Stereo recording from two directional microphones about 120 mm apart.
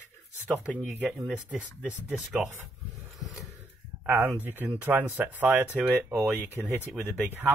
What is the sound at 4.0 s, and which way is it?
Speech, 15° right (ahead or behind).